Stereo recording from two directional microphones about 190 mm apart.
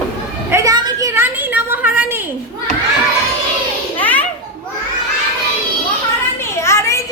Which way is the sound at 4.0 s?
10° left (ahead or behind).